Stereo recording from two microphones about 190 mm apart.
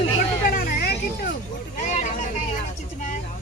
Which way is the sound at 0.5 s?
55° left (ahead or behind).